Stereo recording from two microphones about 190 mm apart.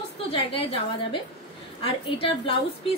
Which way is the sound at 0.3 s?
30° left (ahead or behind).